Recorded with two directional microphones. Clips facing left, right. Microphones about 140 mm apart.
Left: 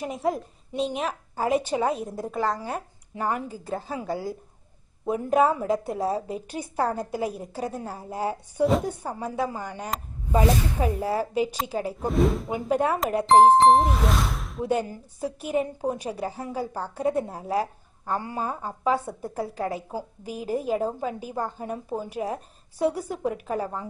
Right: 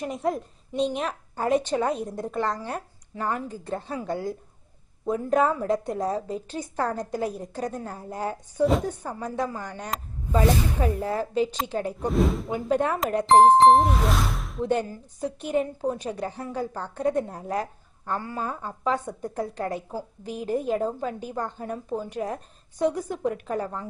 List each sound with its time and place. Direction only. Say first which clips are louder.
0.0 s a woman's voice: even; centre (ahead or behind)
18.1 s a woman's voice: left 1 dB; 15° left (ahead or behind)